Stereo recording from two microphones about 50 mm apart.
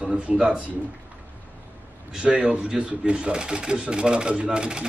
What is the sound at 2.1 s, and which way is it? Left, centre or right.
Speech, centre.